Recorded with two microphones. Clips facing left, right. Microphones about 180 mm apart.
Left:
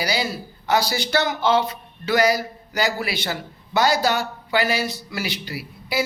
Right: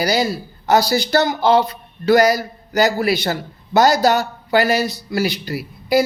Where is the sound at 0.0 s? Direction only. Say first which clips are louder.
Right 6 dB; 40° right (ahead or behind).